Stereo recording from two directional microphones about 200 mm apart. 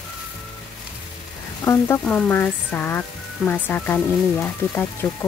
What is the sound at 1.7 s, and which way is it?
Speech, 10° left (ahead or behind).